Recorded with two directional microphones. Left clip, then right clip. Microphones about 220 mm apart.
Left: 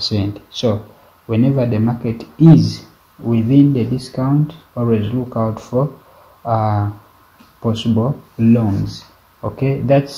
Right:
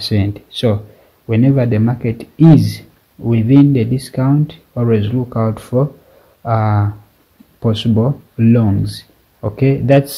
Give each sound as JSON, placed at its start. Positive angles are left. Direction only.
{"t": 0.0, "sound": "speech", "side_deg": -35}